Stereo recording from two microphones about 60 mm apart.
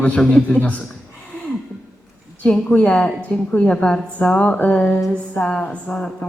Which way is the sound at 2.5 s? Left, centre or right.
Centre.